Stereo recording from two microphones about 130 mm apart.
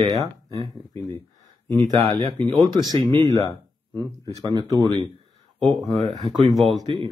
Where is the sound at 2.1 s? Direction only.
35° right (ahead or behind).